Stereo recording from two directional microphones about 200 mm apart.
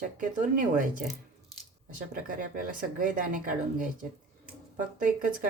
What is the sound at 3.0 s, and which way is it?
Speech, 40° right (ahead or behind).